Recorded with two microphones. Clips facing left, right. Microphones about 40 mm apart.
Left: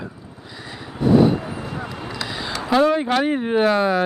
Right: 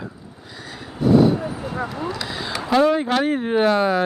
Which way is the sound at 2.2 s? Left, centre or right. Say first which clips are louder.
Even; centre.